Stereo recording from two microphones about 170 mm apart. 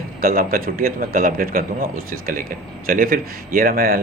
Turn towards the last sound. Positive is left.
turn(degrees=-60)  # may be behind; listen again after turning